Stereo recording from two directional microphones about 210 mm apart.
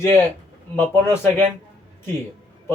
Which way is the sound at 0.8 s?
10° left (ahead or behind).